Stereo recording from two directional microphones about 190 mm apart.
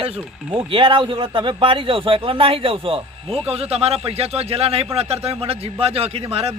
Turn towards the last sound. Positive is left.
turn(degrees=-30)  # may be behind; listen again after turning